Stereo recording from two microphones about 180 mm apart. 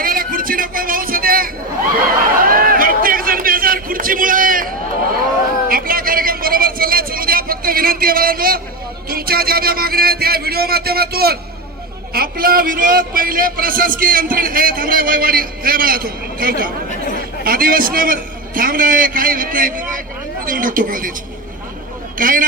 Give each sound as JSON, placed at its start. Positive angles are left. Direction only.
{"t": 0.0, "sound": "speech", "side_deg": -55}
{"t": 2.4, "sound": "a sound", "side_deg": -50}
{"t": 9.0, "sound": "a man's voice", "side_deg": -55}
{"t": 22.2, "sound": "a man's voice", "side_deg": -50}